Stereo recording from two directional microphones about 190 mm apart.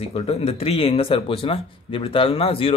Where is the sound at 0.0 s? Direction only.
30° left (ahead or behind).